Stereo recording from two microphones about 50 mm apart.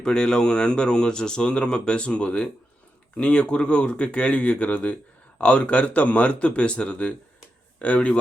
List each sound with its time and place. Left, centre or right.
0.0 s speech: centre